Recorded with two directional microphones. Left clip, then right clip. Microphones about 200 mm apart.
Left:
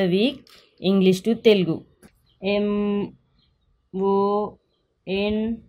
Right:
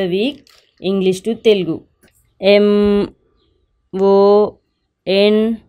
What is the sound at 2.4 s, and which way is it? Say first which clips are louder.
Speech: right 12 dB; 55° right (ahead or behind).